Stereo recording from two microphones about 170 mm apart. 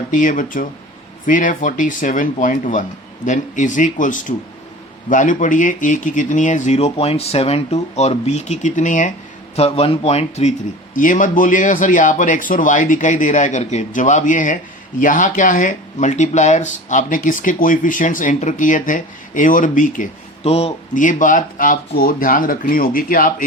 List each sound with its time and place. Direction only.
0.1 s a man's voice: 50° left (ahead or behind)
9.6 s speech: 35° left (ahead or behind)
10.9 s a man's voice: 50° left (ahead or behind)
20.9 s speech: 50° left (ahead or behind)